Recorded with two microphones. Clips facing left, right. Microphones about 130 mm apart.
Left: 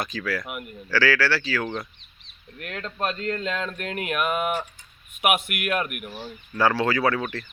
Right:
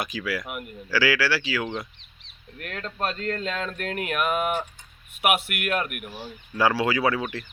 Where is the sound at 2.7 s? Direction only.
10° left (ahead or behind).